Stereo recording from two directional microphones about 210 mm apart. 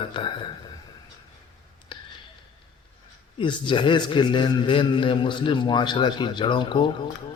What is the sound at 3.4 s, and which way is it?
A man's voice, 25° left (ahead or behind).